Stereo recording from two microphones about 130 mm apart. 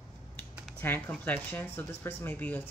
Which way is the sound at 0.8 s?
15° left (ahead or behind).